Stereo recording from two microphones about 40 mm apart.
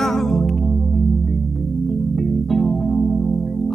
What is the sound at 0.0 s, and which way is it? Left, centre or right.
Music, centre.